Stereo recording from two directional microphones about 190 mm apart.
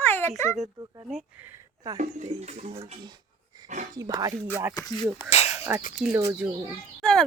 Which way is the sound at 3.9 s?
20° right (ahead or behind).